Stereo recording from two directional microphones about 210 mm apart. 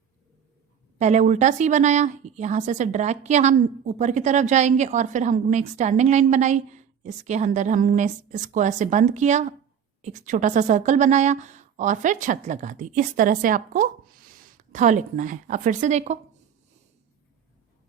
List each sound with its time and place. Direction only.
0.9 s speech: 35° right (ahead or behind)